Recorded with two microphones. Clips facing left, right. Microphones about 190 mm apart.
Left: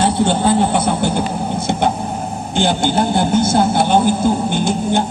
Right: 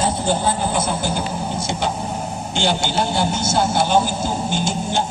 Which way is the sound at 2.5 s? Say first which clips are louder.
Left 5 dB; 55° left (ahead or behind).